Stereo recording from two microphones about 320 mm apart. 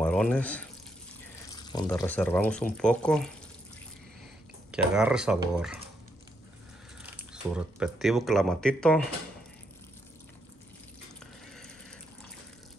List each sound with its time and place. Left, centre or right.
0.0 s speech: centre
4.6 s speech: centre
7.5 s speech: centre